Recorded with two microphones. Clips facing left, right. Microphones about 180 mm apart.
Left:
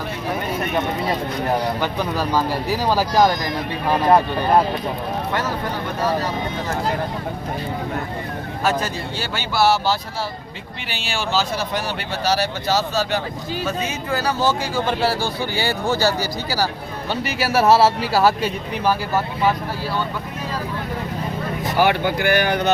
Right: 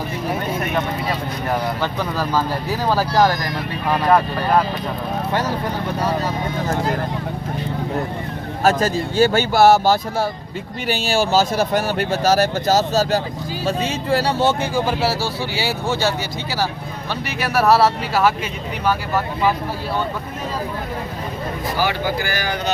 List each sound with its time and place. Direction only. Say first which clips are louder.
1.8 s speech: even; 15° left (ahead or behind)
8.6 s speech: right 5 dB; 45° right (ahead or behind); by 14.7 s 25° right (ahead or behind)
14.8 s speech: right 1 dB; 5° right (ahead or behind)
17.5 s speech: even; 25° left (ahead or behind)
21.8 s speech: left 4 dB; 60° left (ahead or behind)